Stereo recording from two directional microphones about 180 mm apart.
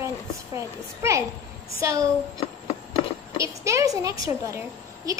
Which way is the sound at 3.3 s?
15° right (ahead or behind).